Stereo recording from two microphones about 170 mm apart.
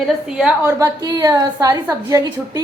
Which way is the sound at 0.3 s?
5° right (ahead or behind).